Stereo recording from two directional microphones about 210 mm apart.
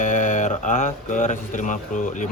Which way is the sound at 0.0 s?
35° left (ahead or behind).